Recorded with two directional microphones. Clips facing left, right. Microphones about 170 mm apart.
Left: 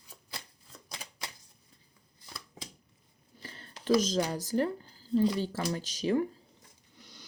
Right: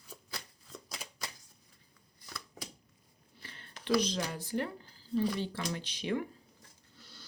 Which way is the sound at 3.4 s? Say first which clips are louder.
Left 4 dB; 40° left (ahead or behind).